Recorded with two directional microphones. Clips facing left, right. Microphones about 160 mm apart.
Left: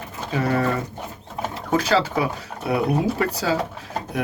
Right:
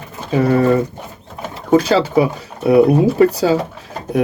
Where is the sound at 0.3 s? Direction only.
25° right (ahead or behind).